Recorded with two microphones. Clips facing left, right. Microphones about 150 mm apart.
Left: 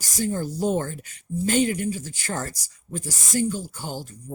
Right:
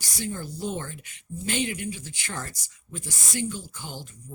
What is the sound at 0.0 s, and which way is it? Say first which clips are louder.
Speech: left 7 dB; 40° left (ahead or behind).